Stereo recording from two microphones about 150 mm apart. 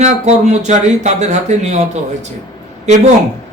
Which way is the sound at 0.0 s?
50° right (ahead or behind).